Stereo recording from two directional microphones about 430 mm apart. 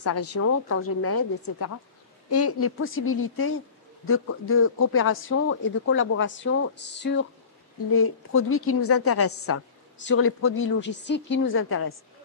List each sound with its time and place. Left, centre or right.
0.0 s a woman's voice: left